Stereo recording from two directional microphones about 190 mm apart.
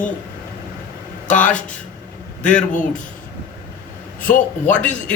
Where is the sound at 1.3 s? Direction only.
5° left (ahead or behind).